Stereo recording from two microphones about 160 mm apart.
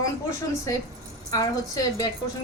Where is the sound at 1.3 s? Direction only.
20° left (ahead or behind).